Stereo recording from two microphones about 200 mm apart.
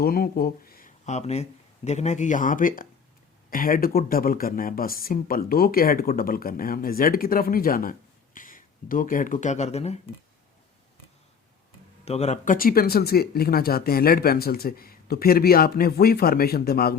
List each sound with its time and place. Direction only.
0.0 s speech: 50° left (ahead or behind); by 10.0 s 30° left (ahead or behind)
12.0 s speech: 35° left (ahead or behind); by 17.0 s 50° left (ahead or behind)